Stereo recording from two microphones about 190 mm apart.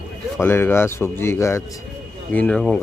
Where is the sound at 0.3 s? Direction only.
10° left (ahead or behind).